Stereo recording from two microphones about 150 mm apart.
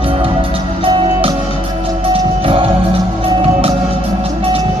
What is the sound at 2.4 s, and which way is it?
Music, 40° right (ahead or behind).